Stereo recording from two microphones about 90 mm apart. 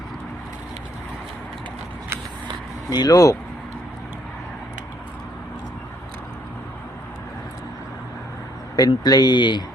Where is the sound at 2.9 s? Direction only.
45° left (ahead or behind).